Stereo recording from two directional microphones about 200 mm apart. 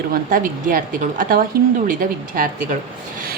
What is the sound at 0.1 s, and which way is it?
A woman's voice, 45° right (ahead or behind).